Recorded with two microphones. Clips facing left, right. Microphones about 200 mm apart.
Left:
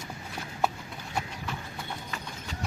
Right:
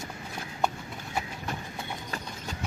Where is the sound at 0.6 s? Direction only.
5° left (ahead or behind).